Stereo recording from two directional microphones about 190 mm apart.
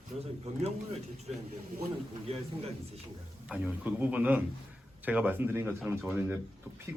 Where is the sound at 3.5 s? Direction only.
5° right (ahead or behind).